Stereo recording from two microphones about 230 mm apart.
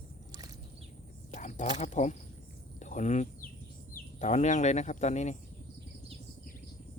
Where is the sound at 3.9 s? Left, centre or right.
Left.